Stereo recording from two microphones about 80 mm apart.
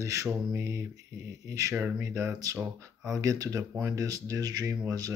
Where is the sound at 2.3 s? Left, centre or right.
Right.